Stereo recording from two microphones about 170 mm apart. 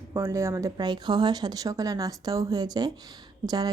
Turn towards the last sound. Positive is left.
turn(degrees=-20)  # may be behind; listen again after turning